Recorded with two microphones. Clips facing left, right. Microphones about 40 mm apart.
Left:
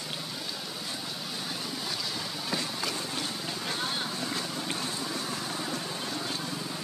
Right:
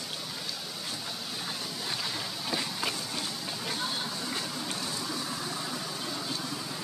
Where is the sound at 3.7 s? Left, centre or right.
Centre.